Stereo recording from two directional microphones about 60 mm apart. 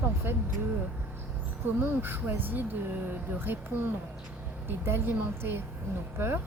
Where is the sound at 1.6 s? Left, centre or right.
Right.